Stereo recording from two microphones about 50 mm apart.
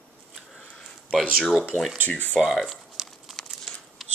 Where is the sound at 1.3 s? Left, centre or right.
Centre.